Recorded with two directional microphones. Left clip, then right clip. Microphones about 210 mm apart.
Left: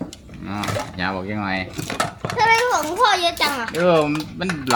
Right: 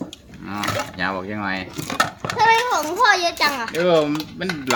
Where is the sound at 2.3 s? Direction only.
5° left (ahead or behind).